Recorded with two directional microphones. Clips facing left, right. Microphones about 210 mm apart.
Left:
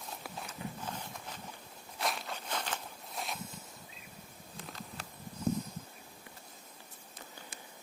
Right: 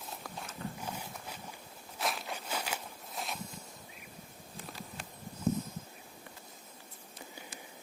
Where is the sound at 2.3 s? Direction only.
10° right (ahead or behind).